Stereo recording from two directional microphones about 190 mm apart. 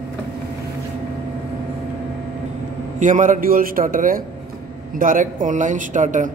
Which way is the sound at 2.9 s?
40° right (ahead or behind).